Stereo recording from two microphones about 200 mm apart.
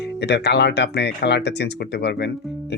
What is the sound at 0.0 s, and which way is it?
Speech, 60° left (ahead or behind).